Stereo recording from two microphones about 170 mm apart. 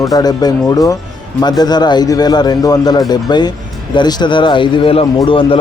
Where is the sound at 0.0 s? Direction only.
20° left (ahead or behind).